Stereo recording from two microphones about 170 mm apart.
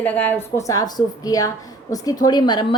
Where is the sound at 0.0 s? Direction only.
10° left (ahead or behind).